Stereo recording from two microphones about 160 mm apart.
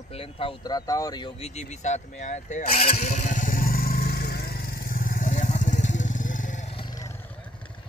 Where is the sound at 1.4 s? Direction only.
45° left (ahead or behind).